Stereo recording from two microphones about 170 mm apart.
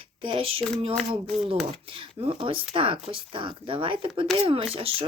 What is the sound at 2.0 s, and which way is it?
Speech, 30° right (ahead or behind).